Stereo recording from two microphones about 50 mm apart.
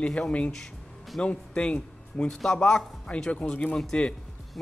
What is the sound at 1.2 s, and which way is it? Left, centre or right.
Speech, left.